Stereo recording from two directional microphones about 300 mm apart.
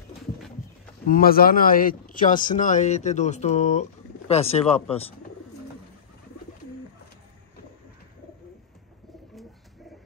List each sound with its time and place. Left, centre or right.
1.0 s a man's voice: left